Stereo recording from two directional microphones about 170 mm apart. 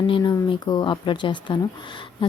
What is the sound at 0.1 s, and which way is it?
Speech, 25° left (ahead or behind).